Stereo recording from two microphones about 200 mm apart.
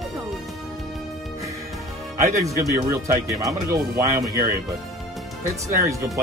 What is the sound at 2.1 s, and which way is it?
Speech, 15° right (ahead or behind).